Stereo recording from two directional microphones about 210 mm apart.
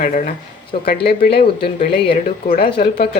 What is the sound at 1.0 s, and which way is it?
Speech, 50° left (ahead or behind).